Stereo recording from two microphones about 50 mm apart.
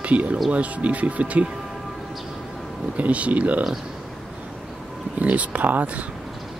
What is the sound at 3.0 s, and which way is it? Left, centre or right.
Speech, right.